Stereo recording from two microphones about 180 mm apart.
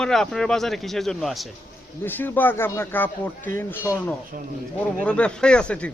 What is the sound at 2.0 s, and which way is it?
A man's voice, 10° left (ahead or behind).